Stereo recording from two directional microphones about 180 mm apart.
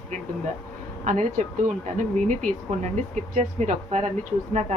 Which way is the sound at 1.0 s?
45° right (ahead or behind).